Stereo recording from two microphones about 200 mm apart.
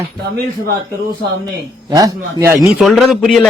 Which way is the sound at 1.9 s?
15° right (ahead or behind).